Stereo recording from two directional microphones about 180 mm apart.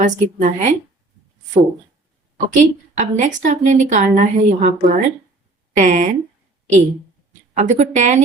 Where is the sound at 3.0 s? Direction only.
45° right (ahead or behind).